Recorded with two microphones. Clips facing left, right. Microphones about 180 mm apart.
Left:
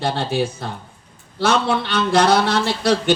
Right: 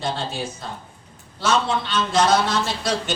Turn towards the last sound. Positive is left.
turn(degrees=65)  # may be behind; listen again after turning